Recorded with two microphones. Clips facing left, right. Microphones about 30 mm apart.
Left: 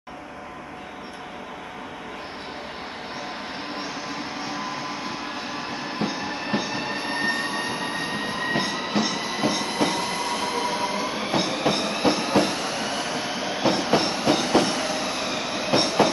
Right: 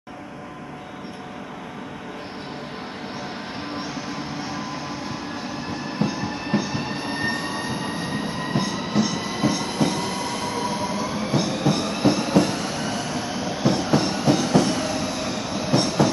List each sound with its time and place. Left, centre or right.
4.5 s vehicle: centre
5.7 s train: centre